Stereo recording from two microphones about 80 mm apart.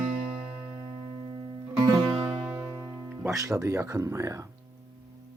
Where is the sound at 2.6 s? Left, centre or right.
Right.